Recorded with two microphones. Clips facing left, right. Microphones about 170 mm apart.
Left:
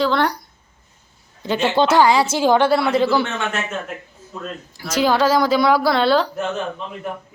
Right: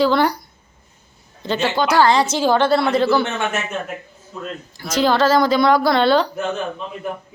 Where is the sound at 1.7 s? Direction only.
25° left (ahead or behind).